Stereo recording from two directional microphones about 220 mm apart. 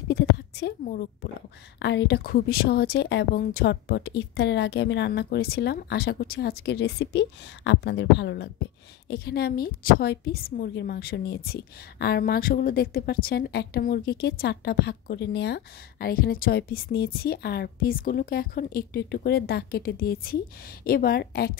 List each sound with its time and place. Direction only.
0.1 s a woman's voice: 50° left (ahead or behind)